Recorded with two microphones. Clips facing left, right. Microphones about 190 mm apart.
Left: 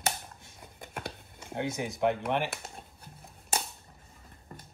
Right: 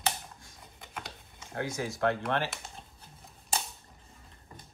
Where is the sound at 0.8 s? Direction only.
60° left (ahead or behind).